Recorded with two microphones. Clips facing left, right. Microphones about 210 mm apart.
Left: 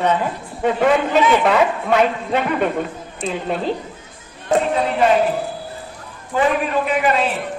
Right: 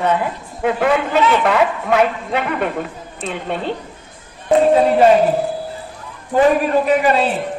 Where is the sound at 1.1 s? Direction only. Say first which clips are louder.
Even; 10° left (ahead or behind).